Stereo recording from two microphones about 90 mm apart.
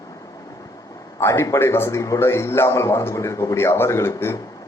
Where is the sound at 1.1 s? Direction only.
30° left (ahead or behind).